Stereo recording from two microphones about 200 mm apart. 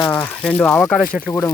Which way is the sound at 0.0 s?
15° left (ahead or behind).